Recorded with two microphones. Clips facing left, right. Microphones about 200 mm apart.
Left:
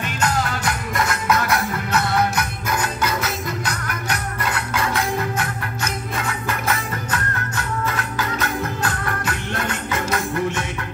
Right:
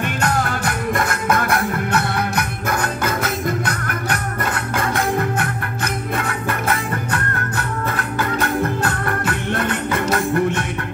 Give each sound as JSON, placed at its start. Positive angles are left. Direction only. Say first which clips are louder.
{"t": 0.0, "sound": "music", "louder": "right 2 dB", "side_deg": -55}